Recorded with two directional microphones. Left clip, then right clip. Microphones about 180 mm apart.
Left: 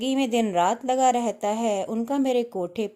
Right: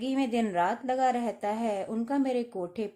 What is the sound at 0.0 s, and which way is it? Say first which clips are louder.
Speech: left 5 dB; 30° left (ahead or behind).